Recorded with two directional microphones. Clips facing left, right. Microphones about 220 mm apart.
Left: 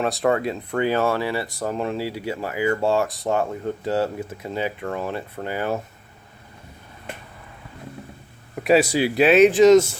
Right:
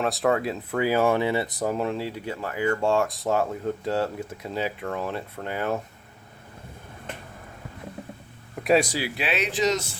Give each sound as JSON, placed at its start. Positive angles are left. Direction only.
{"t": 0.0, "sound": "speech", "side_deg": 0}
{"t": 1.7, "sound": "speech", "side_deg": 0}
{"t": 8.6, "sound": "speech", "side_deg": 5}
{"t": 9.1, "sound": "speech", "side_deg": 45}